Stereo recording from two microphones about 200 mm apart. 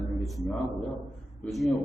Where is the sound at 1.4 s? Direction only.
Centre (ahead or behind).